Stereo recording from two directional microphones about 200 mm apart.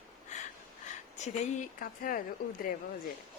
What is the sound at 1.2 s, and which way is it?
Speech, 40° left (ahead or behind).